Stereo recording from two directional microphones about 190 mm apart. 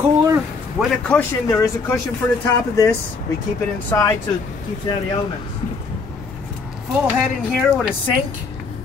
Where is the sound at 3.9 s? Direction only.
15° left (ahead or behind).